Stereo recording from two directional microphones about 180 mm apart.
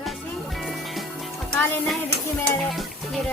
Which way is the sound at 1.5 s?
10° left (ahead or behind).